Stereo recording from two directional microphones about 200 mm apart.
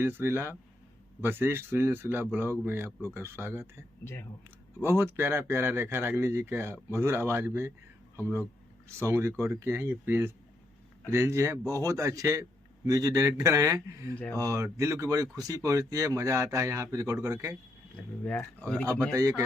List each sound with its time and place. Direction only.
0.0 s speech: 10° right (ahead or behind)
4.0 s speech: 10° left (ahead or behind)
4.8 s speech: 10° right (ahead or behind)
18.3 s speech: 5° left (ahead or behind)